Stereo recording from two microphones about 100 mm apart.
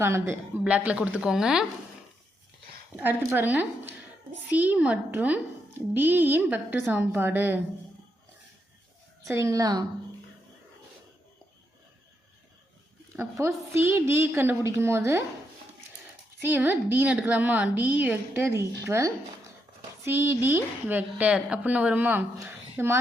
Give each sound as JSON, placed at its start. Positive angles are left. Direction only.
{"t": 0.0, "sound": "a woman's voice", "side_deg": -25}
{"t": 0.6, "sound": "a woman's voice", "side_deg": -15}
{"t": 2.9, "sound": "a woman's voice", "side_deg": -20}
{"t": 9.3, "sound": "a woman's voice", "side_deg": -30}
{"t": 13.1, "sound": "a woman's voice", "side_deg": -25}
{"t": 16.4, "sound": "a woman's voice", "side_deg": -20}